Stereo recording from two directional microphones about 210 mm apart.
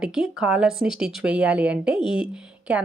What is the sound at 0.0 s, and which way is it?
A woman's voice, 5° right (ahead or behind).